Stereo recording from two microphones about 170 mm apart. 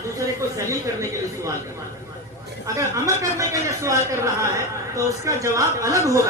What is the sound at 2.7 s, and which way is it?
A man's voice, 20° right (ahead or behind).